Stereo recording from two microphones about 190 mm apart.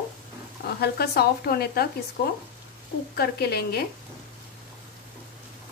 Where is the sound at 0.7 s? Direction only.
55° left (ahead or behind).